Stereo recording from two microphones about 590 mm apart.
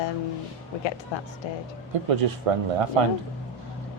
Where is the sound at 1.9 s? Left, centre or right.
Right.